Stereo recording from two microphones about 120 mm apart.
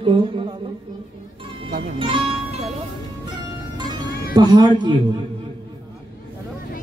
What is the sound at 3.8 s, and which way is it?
Music, 35° right (ahead or behind).